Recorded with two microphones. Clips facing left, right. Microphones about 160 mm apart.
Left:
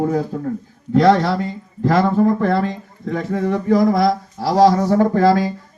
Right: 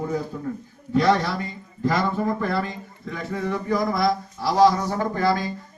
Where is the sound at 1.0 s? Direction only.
90° left.